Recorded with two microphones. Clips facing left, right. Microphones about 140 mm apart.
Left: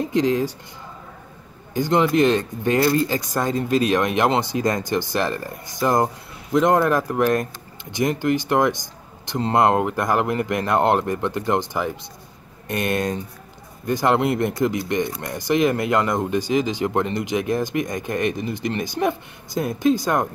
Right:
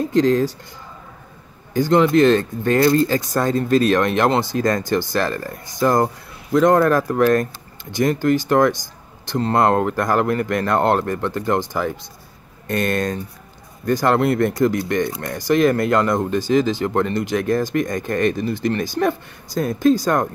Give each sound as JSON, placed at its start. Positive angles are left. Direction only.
{"t": 0.1, "sound": "speech", "side_deg": 10}
{"t": 1.7, "sound": "speech", "side_deg": 20}